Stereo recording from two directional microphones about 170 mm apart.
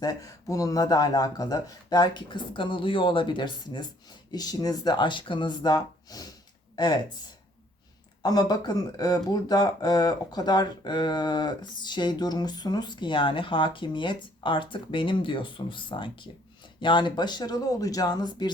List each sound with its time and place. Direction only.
0.0 s speech: 20° left (ahead or behind)
8.2 s speech: 25° left (ahead or behind)